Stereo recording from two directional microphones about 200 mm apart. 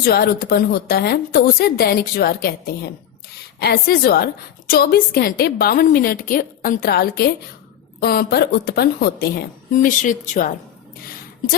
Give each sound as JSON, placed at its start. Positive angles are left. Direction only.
{"t": 0.0, "sound": "a woman's voice", "side_deg": 50}